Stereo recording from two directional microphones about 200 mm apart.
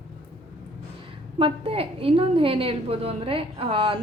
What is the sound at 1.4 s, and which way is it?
A woman's voice, 30° right (ahead or behind).